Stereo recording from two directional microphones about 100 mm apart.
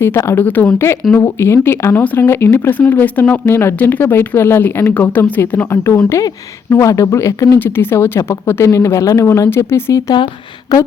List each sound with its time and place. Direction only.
0.0 s speech: 25° left (ahead or behind)